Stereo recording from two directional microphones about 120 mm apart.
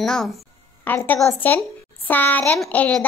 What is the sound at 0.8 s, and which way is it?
A child's voice, 15° left (ahead or behind).